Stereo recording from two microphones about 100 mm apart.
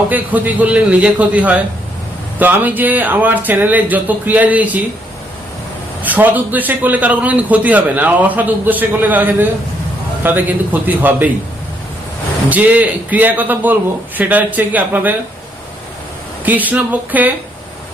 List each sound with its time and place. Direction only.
0.1 s a man's voice: 15° right (ahead or behind)
6.0 s a man's voice: 15° right (ahead or behind)
12.5 s a man's voice: 15° right (ahead or behind)
16.5 s a man's voice: 15° right (ahead or behind)